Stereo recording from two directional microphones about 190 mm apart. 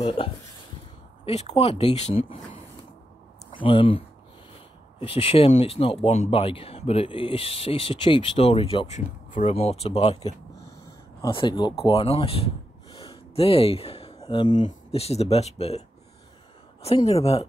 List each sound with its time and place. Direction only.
0.2 s speech: 30° left (ahead or behind)
3.5 s speech: 25° left (ahead or behind)
5.0 s speech: 30° left (ahead or behind)
11.1 s speech: 25° left (ahead or behind)
14.5 s speech: 40° left (ahead or behind)
16.8 s speech: 30° left (ahead or behind)